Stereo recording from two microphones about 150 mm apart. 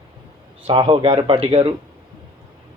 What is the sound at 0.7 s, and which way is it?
Speech, 35° right (ahead or behind).